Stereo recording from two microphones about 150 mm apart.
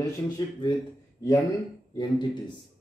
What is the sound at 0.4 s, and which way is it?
Speech, 25° left (ahead or behind).